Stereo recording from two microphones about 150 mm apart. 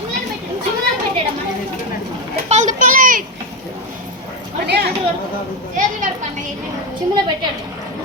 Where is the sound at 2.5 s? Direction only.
55° right (ahead or behind).